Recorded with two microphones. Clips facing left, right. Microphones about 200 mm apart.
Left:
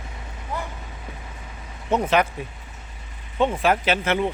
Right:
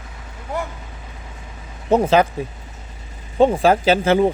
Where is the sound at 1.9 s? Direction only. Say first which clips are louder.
Right 6 dB; 30° right (ahead or behind).